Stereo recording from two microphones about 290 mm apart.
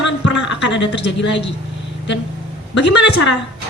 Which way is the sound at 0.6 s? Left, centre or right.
Left.